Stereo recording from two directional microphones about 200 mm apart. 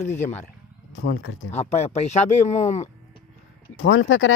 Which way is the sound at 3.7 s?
75° left (ahead or behind).